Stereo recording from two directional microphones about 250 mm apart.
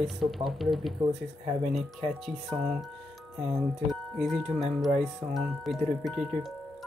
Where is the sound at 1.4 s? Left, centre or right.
Right.